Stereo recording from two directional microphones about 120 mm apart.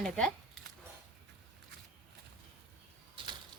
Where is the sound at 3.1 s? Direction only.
40° right (ahead or behind).